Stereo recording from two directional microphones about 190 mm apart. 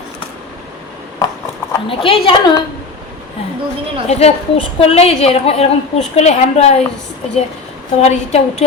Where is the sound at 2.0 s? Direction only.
30° left (ahead or behind).